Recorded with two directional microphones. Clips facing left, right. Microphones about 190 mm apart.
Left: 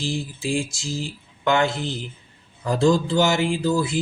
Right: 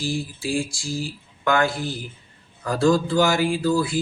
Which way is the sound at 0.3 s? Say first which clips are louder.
Even; 20° left (ahead or behind).